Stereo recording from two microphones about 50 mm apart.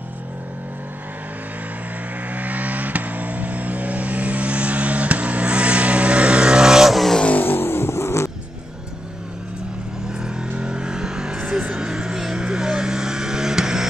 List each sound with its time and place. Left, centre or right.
2.3 s vehicle: right; by 7.2 s centre
7.3 s vehicle: left
10.0 s vehicle: centre